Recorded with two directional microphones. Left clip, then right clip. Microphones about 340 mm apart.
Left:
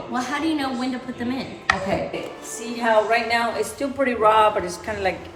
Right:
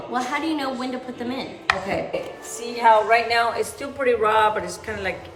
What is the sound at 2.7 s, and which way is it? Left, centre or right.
A man's voice, centre.